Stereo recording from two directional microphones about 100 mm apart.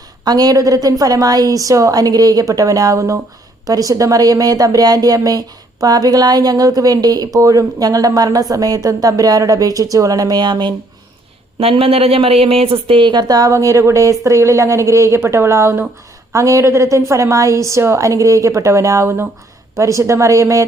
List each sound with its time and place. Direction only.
0.3 s a woman's voice: 40° right (ahead or behind)
11.6 s a woman's voice: 70° right (ahead or behind); by 20.7 s 35° right (ahead or behind)